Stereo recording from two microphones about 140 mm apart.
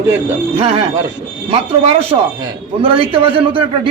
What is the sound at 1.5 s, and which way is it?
A man's voice, 45° right (ahead or behind).